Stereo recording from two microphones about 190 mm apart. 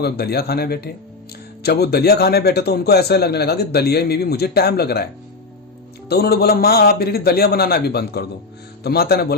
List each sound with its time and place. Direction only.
0.0 s a man's voice: 55° left (ahead or behind)
6.1 s a man's voice: 55° left (ahead or behind)